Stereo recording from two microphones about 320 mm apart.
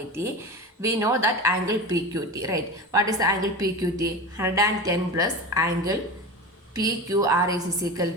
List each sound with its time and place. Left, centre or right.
0.8 s speech: centre